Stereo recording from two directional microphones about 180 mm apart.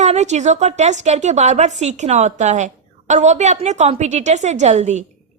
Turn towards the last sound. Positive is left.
turn(degrees=-40)  # may be behind; listen again after turning